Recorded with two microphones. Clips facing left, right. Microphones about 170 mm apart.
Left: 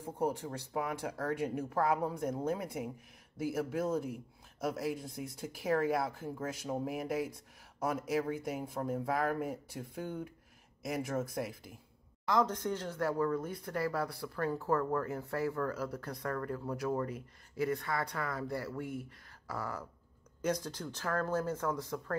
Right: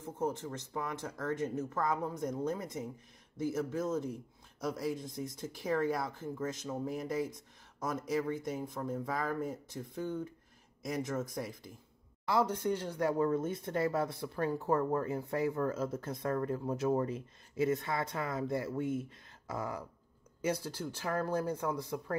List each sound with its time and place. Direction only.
0.0 s speech: 10° left (ahead or behind)
12.3 s speech: 10° right (ahead or behind)
20.4 s speech: 10° right (ahead or behind)